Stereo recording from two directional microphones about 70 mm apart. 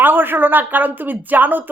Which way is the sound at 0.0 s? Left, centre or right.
Right.